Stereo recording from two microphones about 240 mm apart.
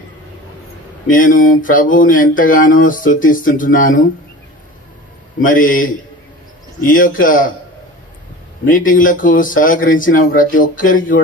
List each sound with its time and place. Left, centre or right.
1.0 s speech: left
5.4 s speech: left
8.6 s speech: left